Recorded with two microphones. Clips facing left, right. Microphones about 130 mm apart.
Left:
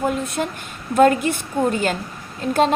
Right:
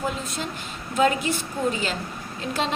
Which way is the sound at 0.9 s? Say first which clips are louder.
Left 6 dB; 55° left (ahead or behind).